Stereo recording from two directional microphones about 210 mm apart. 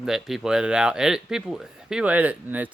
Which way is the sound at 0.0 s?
Centre (ahead or behind).